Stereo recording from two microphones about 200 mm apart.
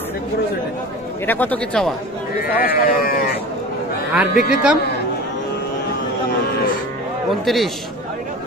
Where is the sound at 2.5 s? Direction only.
50° left (ahead or behind).